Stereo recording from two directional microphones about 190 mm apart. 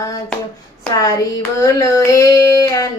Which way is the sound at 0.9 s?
15° left (ahead or behind).